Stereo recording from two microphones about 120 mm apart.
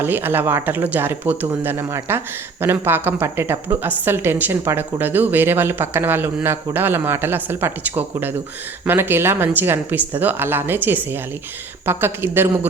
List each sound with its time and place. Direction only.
0.0 s speech: 15° right (ahead or behind)